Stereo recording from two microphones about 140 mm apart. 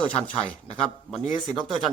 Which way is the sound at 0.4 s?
40° left (ahead or behind).